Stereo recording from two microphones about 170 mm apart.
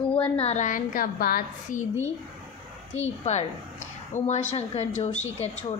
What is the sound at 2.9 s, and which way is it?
A woman's voice, 40° left (ahead or behind).